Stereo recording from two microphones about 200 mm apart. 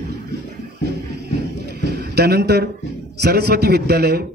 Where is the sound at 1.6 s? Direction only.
55° right (ahead or behind).